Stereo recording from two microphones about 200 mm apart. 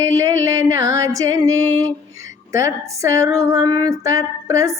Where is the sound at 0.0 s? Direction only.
15° right (ahead or behind).